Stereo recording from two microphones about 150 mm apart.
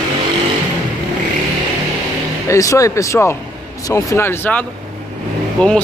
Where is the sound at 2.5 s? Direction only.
20° left (ahead or behind).